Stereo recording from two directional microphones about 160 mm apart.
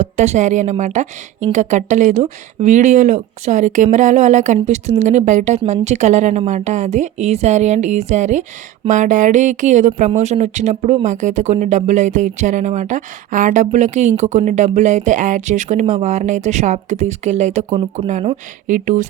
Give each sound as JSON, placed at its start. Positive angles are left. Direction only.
{"t": 0.0, "sound": "a woman's voice", "side_deg": -50}